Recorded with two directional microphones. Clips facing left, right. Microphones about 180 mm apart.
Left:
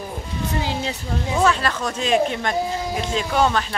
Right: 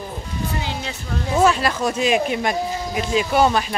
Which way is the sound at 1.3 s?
10° right (ahead or behind).